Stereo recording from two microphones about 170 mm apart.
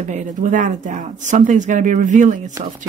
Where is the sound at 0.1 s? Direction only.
45° right (ahead or behind).